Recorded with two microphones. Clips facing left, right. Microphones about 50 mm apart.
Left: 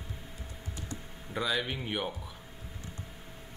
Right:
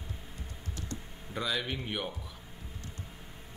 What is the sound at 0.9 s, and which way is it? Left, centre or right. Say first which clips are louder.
Speech: left 2 dB; centre.